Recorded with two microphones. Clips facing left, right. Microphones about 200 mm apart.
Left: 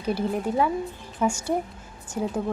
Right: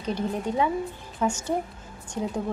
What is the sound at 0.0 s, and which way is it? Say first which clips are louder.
A woman's voice: left 2 dB; 10° left (ahead or behind).